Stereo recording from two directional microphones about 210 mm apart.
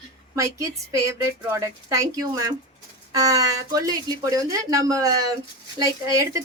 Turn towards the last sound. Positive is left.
turn(degrees=-15)  # may be behind; listen again after turning